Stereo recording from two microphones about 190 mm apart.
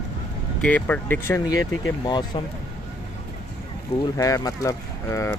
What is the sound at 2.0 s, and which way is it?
Speech, 25° left (ahead or behind).